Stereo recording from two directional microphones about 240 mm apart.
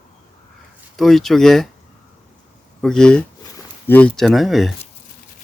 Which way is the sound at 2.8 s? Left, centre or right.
Centre.